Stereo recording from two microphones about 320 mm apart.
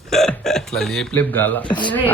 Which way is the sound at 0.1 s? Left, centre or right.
Centre.